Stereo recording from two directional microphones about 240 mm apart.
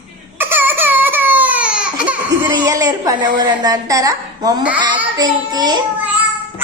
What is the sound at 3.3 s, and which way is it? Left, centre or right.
A woman's voice, centre.